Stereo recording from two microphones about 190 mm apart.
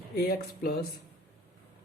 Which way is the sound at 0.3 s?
55° left (ahead or behind).